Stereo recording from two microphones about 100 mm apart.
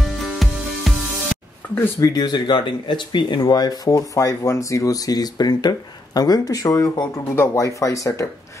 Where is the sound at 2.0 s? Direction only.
40° left (ahead or behind).